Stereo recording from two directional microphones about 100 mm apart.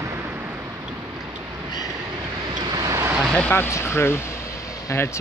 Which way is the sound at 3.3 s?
10° left (ahead or behind).